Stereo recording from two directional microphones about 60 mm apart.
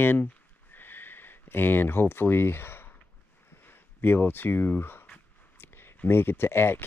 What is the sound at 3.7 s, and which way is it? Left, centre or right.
Speech, left.